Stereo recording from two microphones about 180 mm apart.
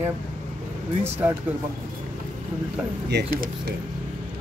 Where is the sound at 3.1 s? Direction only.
60° right (ahead or behind).